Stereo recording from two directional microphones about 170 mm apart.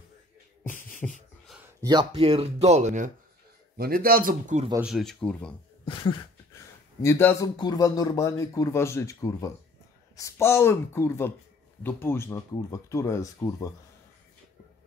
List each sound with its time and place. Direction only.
0.7 s beatboxing: 50° left (ahead or behind)
1.8 s speech: 25° right (ahead or behind); by 3.1 s 45° right (ahead or behind)
3.7 s a man's voice: 60° right (ahead or behind)
4.8 s speech: centre (ahead or behind)
5.9 s a sound: 25° left (ahead or behind)
7.0 s speech: 15° left (ahead or behind)
7.4 s speech: 25° left (ahead or behind)